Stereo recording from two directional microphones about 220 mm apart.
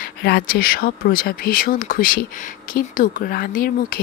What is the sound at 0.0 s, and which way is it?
Speech, 45° left (ahead or behind).